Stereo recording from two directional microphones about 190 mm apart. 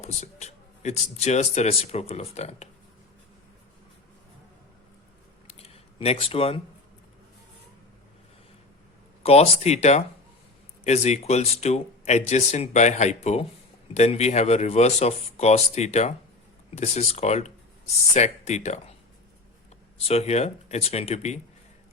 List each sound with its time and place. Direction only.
0.0 s speech: 35° left (ahead or behind)
5.5 s a sound: 35° left (ahead or behind)
9.2 s speech: 30° left (ahead or behind)
20.0 s speech: 30° left (ahead or behind)